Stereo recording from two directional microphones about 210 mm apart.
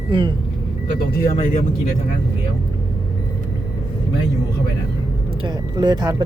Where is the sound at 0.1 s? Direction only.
20° right (ahead or behind).